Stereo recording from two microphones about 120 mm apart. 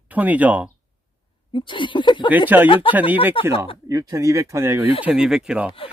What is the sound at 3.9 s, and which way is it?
Speech, 30° right (ahead or behind).